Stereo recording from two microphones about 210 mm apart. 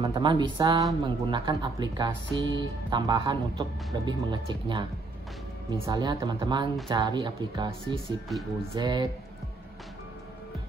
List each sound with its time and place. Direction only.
0.0 s speech: 20° right (ahead or behind)
5.9 s speech: 20° right (ahead or behind)
7.9 s speech: centre (ahead or behind)
8.7 s speech: 20° right (ahead or behind)